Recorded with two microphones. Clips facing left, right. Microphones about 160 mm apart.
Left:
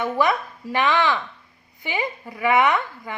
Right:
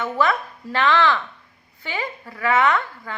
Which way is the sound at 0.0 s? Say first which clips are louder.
Even; 15° left (ahead or behind).